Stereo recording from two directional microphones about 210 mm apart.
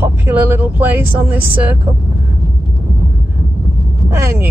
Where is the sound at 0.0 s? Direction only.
10° right (ahead or behind).